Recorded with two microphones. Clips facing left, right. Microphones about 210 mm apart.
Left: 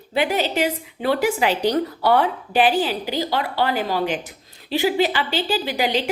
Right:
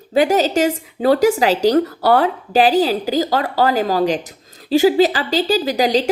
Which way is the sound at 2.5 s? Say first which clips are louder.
Right 5 dB; 40° right (ahead or behind).